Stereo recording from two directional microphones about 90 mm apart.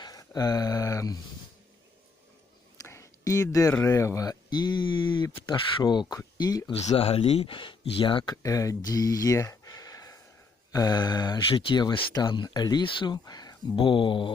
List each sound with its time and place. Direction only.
0.0 s a sound: 45° left (ahead or behind)
2.7 s speech: 35° left (ahead or behind); by 5.5 s 75° left (ahead or behind)
5.8 s speech: 50° left (ahead or behind)
6.9 s speech: 90° left; by 8.4 s 60° left (ahead or behind)
8.4 s speech: 40° left (ahead or behind)
12.8 s speech: 70° left (ahead or behind)
13.2 s a sound: 45° left (ahead or behind)
13.7 s speech: 70° left (ahead or behind)